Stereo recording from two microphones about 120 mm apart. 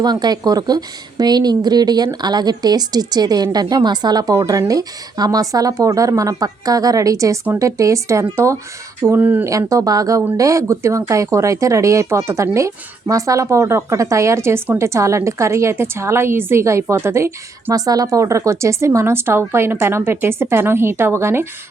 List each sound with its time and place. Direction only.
0.0 s a woman's voice: 35° right (ahead or behind); by 9.5 s 15° right (ahead or behind)
9.5 s speech: 25° right (ahead or behind)